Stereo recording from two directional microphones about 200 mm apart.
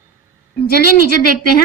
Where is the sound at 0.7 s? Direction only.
50° left (ahead or behind).